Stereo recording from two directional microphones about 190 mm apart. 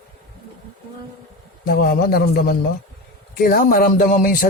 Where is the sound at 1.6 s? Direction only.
55° left (ahead or behind).